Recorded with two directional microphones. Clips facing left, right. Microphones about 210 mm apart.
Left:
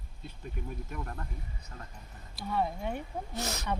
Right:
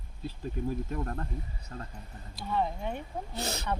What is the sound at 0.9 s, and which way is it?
Speech, 35° right (ahead or behind).